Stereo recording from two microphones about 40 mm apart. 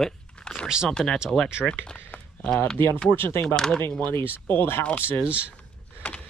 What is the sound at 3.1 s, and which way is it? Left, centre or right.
Speech, left.